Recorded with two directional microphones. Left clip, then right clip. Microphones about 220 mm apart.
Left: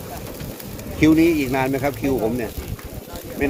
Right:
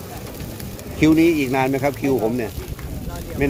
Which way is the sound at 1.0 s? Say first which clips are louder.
Even; 10° right (ahead or behind).